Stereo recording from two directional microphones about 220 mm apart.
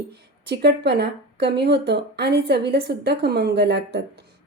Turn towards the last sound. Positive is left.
turn(degrees=-50)  # may be behind; listen again after turning